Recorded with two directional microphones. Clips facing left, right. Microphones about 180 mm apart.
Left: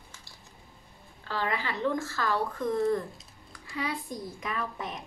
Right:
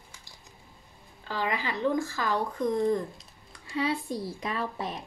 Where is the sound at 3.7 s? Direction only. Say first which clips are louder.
Right 5 dB; 30° right (ahead or behind).